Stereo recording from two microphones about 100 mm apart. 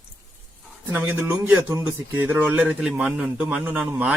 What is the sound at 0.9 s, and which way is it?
A man's voice, 15° right (ahead or behind).